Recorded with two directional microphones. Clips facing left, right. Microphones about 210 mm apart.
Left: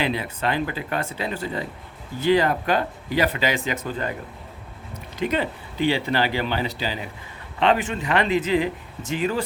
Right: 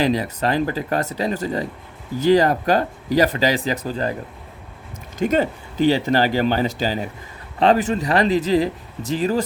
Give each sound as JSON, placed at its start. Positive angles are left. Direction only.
{"t": 0.0, "sound": "speech", "side_deg": -40}
{"t": 5.2, "sound": "speech", "side_deg": -45}